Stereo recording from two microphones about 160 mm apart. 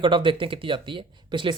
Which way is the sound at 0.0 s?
30° right (ahead or behind).